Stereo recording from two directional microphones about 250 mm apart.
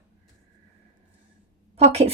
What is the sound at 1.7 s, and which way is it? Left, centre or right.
Speech, right.